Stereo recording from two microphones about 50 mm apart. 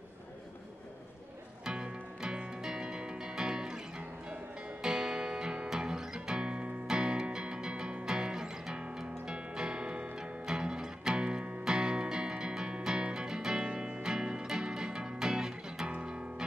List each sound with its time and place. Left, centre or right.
1.6 s music: centre
4.8 s music: centre